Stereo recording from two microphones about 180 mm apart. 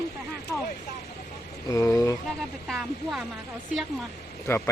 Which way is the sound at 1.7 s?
20° left (ahead or behind).